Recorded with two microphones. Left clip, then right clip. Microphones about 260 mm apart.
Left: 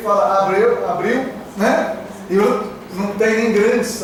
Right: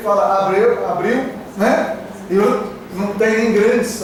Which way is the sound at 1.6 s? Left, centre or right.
Centre.